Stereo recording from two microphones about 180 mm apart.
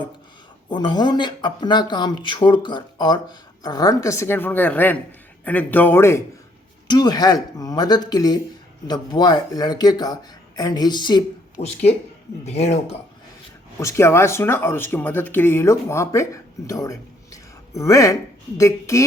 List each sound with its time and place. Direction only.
0.7 s speech: 25° left (ahead or behind)
11.6 s speech: 35° left (ahead or behind)
13.7 s speech: 15° left (ahead or behind)